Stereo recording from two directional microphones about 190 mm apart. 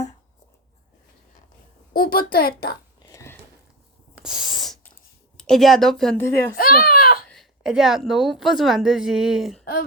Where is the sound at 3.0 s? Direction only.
15° left (ahead or behind).